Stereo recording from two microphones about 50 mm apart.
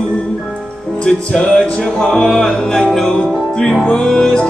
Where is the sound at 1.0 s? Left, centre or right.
Centre.